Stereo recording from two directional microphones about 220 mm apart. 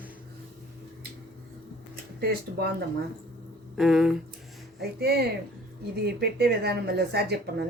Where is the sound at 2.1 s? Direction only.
45° right (ahead or behind).